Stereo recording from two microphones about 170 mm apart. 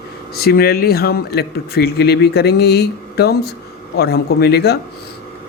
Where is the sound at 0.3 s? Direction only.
65° left (ahead or behind).